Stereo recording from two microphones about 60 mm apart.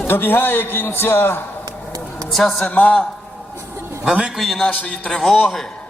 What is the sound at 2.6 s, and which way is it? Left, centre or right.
Speech, left.